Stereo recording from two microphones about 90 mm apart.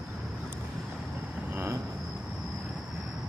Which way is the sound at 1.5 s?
30° right (ahead or behind).